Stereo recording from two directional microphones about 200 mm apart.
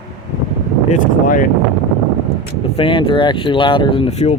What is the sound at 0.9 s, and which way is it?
Speech, 40° left (ahead or behind).